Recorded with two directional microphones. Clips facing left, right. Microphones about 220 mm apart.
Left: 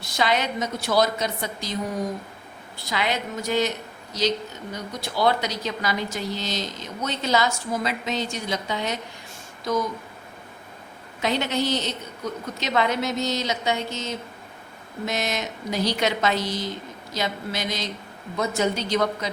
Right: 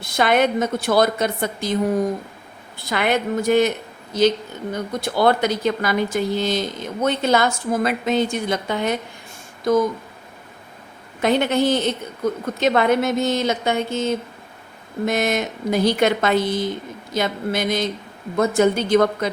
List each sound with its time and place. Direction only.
0.0 s a woman's voice: 55° right (ahead or behind)
2.7 s a woman's voice: 55° right (ahead or behind)
11.2 s speech: 55° right (ahead or behind)